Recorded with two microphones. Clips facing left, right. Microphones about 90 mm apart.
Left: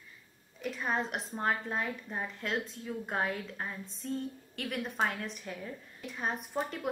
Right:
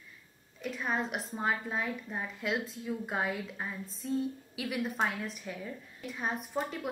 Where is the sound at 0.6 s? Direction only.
Centre (ahead or behind).